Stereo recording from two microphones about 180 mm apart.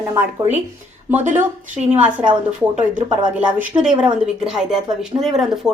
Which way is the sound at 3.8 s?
5° right (ahead or behind).